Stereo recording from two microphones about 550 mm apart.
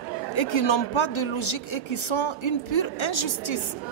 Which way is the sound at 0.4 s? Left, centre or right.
Left.